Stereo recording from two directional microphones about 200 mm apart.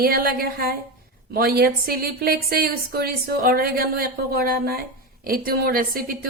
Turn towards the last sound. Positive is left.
turn(degrees=-45)  # may be behind; listen again after turning